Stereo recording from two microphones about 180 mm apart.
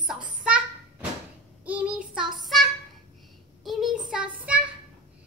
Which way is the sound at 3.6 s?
Centre (ahead or behind).